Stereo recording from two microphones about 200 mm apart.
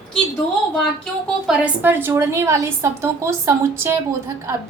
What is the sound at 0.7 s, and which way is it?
A woman's voice, centre (ahead or behind).